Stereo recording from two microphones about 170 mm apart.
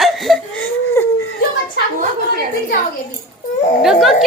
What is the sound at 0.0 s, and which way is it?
Crying, centre (ahead or behind).